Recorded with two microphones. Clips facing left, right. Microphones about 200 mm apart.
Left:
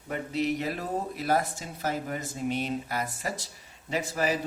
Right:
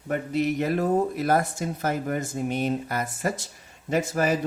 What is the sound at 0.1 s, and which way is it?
Speech, 50° right (ahead or behind).